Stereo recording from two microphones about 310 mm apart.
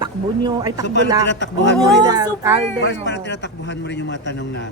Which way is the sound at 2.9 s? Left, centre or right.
Left.